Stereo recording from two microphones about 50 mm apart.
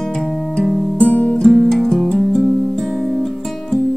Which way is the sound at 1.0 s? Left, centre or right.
Left.